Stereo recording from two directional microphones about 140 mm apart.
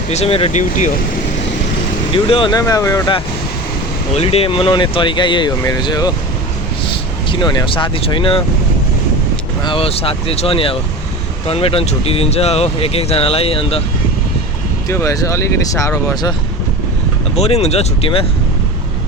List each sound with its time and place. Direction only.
0.1 s speech: 45° left (ahead or behind)
0.5 s speech: 60° left (ahead or behind)
2.1 s speech: 40° left (ahead or behind)
2.5 s speech: 25° left (ahead or behind)
4.1 s speech: 45° left (ahead or behind); by 6.1 s 30° left (ahead or behind)
7.3 s speech: 35° left (ahead or behind)
9.6 s speech: 40° left (ahead or behind)
14.8 s speech: 25° left (ahead or behind)
17.3 s speech: 50° left (ahead or behind)